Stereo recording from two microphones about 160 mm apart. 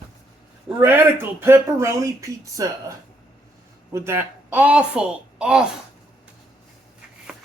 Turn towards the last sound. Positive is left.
turn(degrees=-5)  # may be behind; listen again after turning